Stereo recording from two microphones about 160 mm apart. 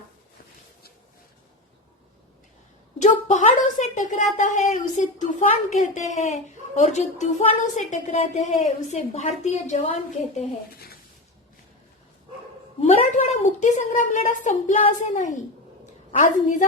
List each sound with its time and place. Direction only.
3.0 s a sound: 50° left (ahead or behind)
4.4 s a woman's voice: 50° left (ahead or behind)
12.8 s a woman's voice: 45° left (ahead or behind)